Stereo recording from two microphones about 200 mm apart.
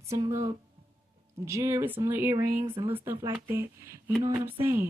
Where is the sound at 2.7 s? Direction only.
25° right (ahead or behind).